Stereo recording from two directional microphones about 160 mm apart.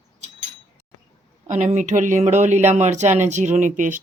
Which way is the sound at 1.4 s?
50° right (ahead or behind).